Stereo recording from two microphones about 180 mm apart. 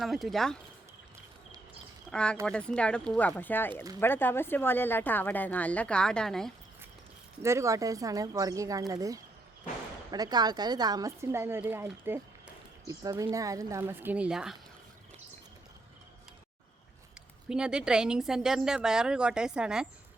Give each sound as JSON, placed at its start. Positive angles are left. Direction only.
{"t": 0.0, "sound": "a woman's voice", "side_deg": 0}
{"t": 2.0, "sound": "a woman's voice", "side_deg": 5}
{"t": 7.4, "sound": "speech", "side_deg": -15}
{"t": 17.5, "sound": "a woman's voice", "side_deg": -5}